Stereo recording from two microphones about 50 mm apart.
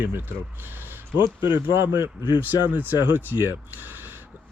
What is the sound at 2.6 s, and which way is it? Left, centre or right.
Speech, right.